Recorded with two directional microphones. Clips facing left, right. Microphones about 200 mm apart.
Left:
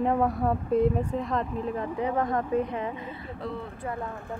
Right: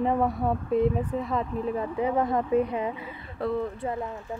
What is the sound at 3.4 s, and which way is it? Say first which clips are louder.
Speech: right 7 dB; 60° right (ahead or behind).